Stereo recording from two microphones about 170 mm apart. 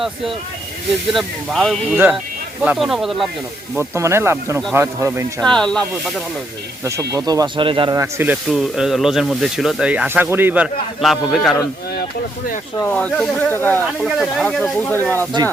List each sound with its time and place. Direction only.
1.1 s speech: centre (ahead or behind)
3.8 s speech: 15° right (ahead or behind)
5.4 s speech: 5° left (ahead or behind)
6.8 s speech: 15° right (ahead or behind)
7.9 s speech: 15° right (ahead or behind)
8.4 s speech: centre (ahead or behind)
12.8 s speech: 5° left (ahead or behind)
14.0 s speech: centre (ahead or behind)